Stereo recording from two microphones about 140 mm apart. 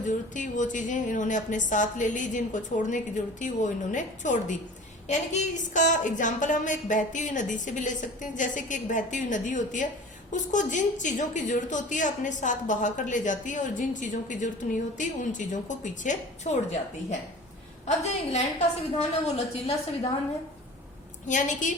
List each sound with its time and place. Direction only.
0.0 s a woman's voice: 65° left (ahead or behind)
17.8 s a woman's voice: 55° left (ahead or behind)
21.2 s a woman's voice: 65° left (ahead or behind)